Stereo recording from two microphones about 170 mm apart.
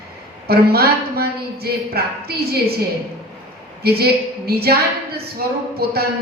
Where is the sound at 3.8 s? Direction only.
65° right (ahead or behind).